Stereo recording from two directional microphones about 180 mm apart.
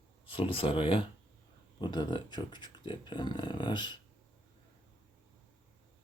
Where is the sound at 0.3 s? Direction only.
30° left (ahead or behind).